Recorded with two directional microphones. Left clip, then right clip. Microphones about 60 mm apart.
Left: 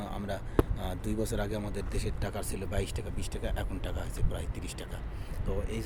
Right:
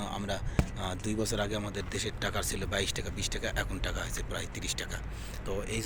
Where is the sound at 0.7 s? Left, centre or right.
Left.